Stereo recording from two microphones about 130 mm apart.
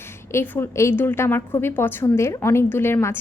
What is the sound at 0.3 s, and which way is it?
A woman's voice, 20° left (ahead or behind).